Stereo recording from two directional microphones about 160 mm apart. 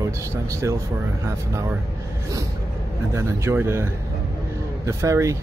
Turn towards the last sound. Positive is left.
turn(degrees=-20)  # may be behind; listen again after turning